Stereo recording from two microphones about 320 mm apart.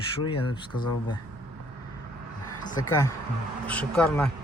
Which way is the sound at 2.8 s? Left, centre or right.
Centre.